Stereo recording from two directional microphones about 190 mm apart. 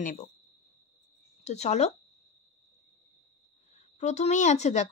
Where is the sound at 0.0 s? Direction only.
40° left (ahead or behind).